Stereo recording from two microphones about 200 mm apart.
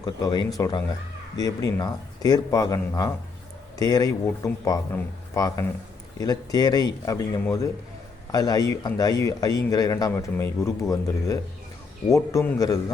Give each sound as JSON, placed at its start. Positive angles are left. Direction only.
{"t": 0.0, "sound": "a man's voice", "side_deg": 20}